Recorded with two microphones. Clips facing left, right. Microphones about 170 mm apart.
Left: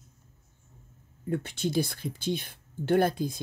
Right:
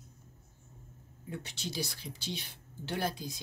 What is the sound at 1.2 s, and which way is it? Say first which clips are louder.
Speech: left 11 dB; 55° left (ahead or behind).